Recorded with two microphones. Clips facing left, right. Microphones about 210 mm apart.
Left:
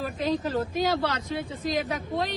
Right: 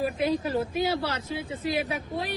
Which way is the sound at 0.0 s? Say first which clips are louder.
Right 1 dB; 10° right (ahead or behind).